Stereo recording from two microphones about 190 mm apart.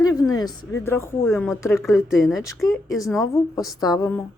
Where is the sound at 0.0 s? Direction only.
20° left (ahead or behind).